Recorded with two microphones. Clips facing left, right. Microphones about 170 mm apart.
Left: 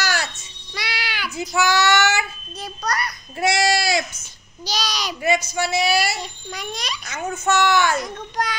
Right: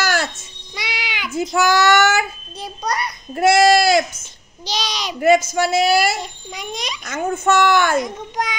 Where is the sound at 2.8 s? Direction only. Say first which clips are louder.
Right 2 dB; 25° right (ahead or behind).